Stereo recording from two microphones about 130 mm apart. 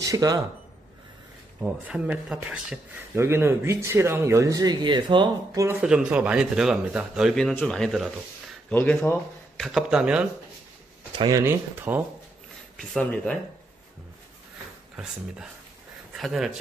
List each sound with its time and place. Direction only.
0.0 s speech: 25° right (ahead or behind)
1.6 s a man's voice: 10° right (ahead or behind)
3.2 s speech: 20° right (ahead or behind)
5.8 s a man's voice: 10° right (ahead or behind); by 9.2 s 15° left (ahead or behind)
9.6 s speech: centre (ahead or behind)
11.1 s speech: 30° right (ahead or behind)
11.4 s a man's voice: 20° right (ahead or behind)
12.7 s speech: 5° left (ahead or behind)
16.2 s speech: centre (ahead or behind)